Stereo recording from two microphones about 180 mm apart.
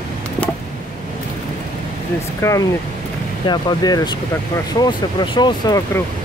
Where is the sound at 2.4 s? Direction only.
15° left (ahead or behind).